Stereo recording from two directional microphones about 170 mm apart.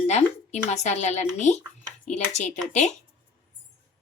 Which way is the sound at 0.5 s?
40° left (ahead or behind).